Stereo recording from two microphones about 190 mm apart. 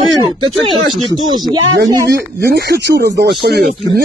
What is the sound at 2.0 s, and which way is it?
Speech, 60° right (ahead or behind).